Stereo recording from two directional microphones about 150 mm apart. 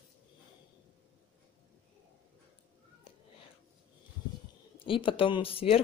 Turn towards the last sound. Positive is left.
turn(degrees=40)  # may be behind; listen again after turning